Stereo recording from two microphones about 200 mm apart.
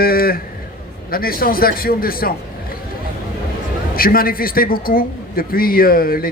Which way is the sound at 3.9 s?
45° left (ahead or behind).